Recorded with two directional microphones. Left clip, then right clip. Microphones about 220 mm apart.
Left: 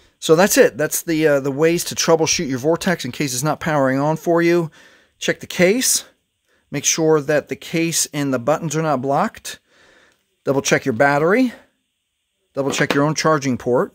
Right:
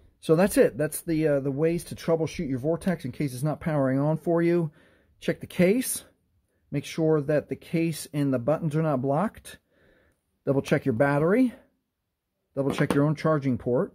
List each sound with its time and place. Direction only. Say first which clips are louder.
0.2 s speech: left 8 dB; 20° left (ahead or behind)